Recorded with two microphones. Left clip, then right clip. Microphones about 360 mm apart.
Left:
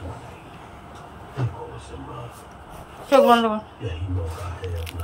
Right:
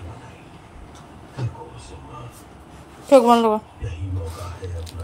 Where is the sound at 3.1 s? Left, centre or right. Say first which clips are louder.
Right 2 dB; centre.